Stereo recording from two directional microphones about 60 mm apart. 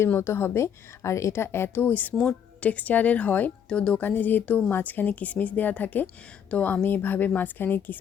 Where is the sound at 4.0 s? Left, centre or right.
Left.